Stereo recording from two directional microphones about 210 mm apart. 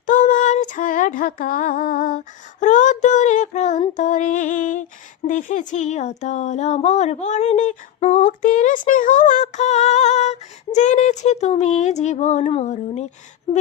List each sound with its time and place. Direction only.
0.0 s female singing: 40° left (ahead or behind)